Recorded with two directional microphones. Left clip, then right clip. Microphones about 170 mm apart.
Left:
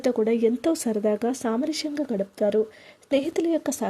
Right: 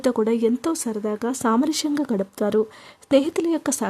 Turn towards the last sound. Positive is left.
turn(degrees=-20)  # may be behind; listen again after turning